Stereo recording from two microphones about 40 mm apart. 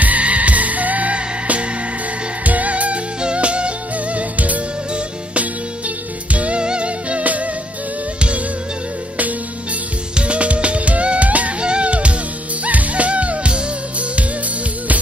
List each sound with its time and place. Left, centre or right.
0.0 s music: right
10.1 s music: right